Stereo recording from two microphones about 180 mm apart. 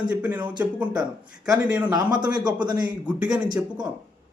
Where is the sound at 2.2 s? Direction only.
25° right (ahead or behind).